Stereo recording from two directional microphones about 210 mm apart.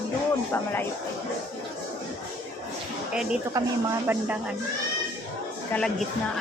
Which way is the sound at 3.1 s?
5° right (ahead or behind).